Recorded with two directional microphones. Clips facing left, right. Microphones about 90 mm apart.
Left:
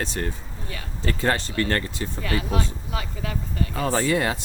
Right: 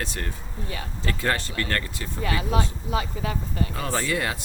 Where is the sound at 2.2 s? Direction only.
25° right (ahead or behind).